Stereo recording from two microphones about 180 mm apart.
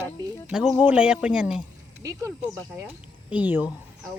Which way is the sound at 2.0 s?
15° right (ahead or behind).